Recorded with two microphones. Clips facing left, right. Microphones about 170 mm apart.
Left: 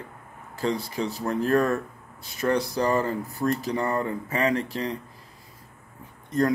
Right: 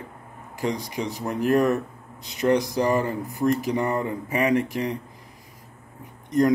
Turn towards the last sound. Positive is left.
turn(degrees=-15)  # may be behind; listen again after turning